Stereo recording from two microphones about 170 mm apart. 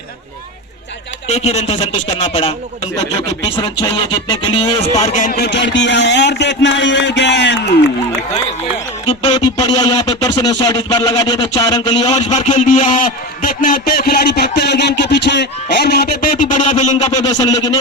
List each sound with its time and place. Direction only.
1.3 s speech: 40° left (ahead or behind)
2.9 s music: 20° left (ahead or behind); by 7.8 s 85° left
9.0 s speech: 30° left (ahead or behind)
12.1 s a man's voice: 45° left (ahead or behind)
17.2 s speech: 20° left (ahead or behind)